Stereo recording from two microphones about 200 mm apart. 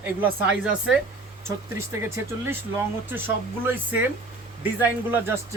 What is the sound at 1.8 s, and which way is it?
Speech, 15° right (ahead or behind).